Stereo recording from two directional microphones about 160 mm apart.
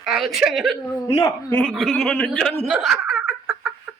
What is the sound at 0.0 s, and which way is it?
Speech, centre (ahead or behind).